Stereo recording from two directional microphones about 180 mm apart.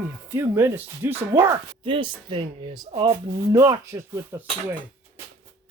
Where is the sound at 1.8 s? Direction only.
30° right (ahead or behind).